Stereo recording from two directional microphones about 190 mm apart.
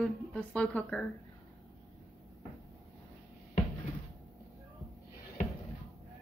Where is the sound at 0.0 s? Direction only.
Centre (ahead or behind).